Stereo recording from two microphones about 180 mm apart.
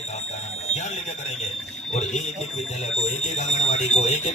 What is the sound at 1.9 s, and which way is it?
Speech, 40° left (ahead or behind).